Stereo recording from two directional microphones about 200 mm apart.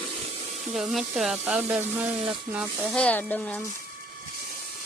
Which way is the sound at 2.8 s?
5° left (ahead or behind).